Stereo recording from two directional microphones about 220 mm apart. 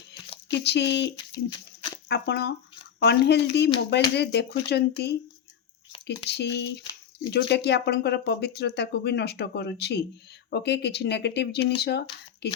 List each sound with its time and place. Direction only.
0.4 s speech: 50° left (ahead or behind)
1.3 s speech: 20° left (ahead or behind)
2.0 s speech: 50° left (ahead or behind)